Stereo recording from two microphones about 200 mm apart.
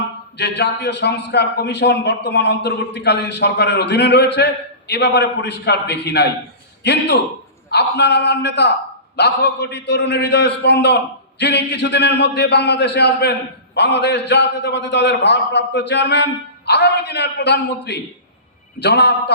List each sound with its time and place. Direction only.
0.3 s a man's voice: 55° left (ahead or behind)